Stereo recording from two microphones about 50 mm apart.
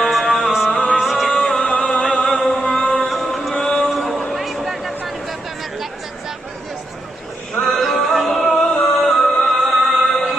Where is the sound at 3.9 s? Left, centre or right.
Centre.